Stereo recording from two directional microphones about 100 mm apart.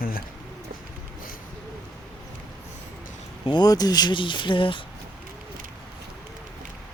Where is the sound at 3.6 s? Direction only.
40° left (ahead or behind); by 4.8 s 60° left (ahead or behind).